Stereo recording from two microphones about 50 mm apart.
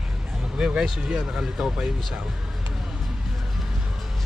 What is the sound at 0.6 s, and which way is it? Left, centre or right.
Speech, centre.